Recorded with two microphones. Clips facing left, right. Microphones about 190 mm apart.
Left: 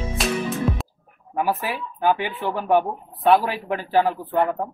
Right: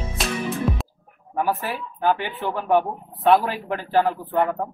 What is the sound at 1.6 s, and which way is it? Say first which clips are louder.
Speech: left 1 dB; centre (ahead or behind).